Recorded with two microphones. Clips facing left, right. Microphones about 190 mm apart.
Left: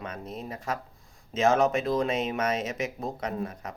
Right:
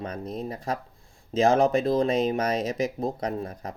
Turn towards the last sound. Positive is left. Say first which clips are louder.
# right 2 dB
turn(degrees=-35)  # may be behind; listen again after turning